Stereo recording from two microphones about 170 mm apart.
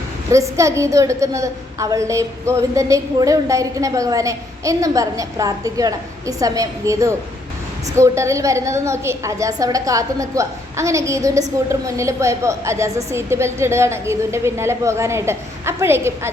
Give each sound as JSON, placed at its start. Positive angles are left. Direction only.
{"t": 0.3, "sound": "a woman's voice", "side_deg": -20}